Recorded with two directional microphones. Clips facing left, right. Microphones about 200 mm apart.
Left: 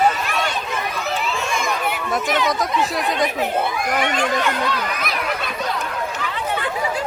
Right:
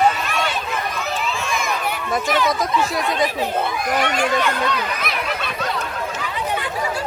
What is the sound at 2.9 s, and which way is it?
Speech, centre (ahead or behind).